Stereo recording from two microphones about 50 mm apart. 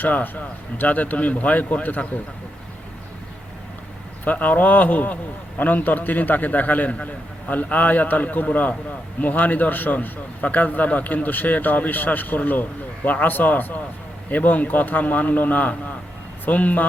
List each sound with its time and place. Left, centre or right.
0.0 s a man's voice: left
4.2 s a man's voice: left